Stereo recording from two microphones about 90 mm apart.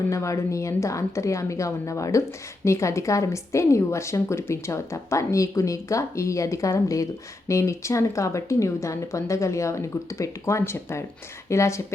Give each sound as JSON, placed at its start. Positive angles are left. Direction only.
{"t": 0.1, "sound": "a woman's voice", "side_deg": 35}